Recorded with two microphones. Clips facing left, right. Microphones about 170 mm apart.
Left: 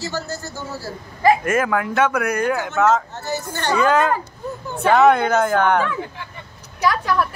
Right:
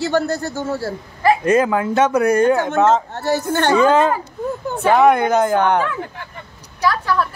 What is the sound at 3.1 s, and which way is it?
Speech, 60° right (ahead or behind).